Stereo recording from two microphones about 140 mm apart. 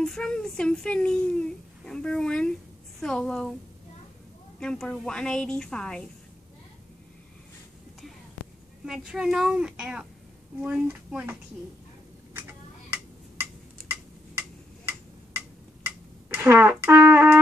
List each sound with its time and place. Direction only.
0.0 s speech: 5° left (ahead or behind)
4.6 s speech: 5° left (ahead or behind)
8.8 s speech: 5° right (ahead or behind)
13.4 s tick-tock: 20° right (ahead or behind)
16.3 s speech: 15° right (ahead or behind)